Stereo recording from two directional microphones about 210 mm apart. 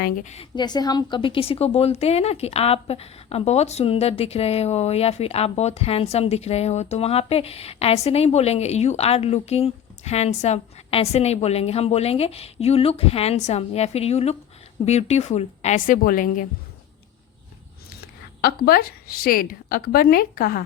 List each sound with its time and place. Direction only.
0.0 s a woman's voice: 35° left (ahead or behind)
0.5 s a woman's voice: 20° left (ahead or behind); by 16.5 s 40° left (ahead or behind)
17.8 s speech: 45° left (ahead or behind)